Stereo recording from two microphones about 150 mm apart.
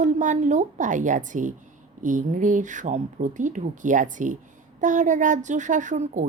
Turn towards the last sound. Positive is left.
turn(degrees=-55)  # may be behind; listen again after turning